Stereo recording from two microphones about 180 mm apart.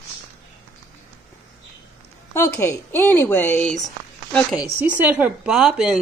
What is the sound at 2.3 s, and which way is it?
A woman's voice, 15° left (ahead or behind).